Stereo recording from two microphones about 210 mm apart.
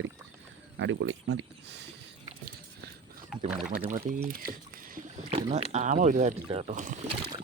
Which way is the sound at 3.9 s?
40° right (ahead or behind).